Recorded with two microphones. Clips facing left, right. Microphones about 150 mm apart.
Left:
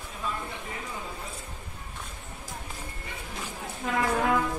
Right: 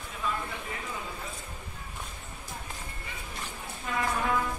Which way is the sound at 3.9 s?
80° left.